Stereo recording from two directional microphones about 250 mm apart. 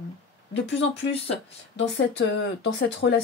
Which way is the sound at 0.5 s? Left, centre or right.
Left.